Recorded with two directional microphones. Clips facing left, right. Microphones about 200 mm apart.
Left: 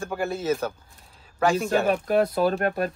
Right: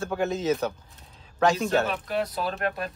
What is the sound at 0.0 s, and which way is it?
Speech, 10° left (ahead or behind).